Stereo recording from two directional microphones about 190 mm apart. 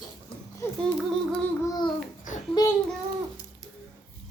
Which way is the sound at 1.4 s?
20° left (ahead or behind).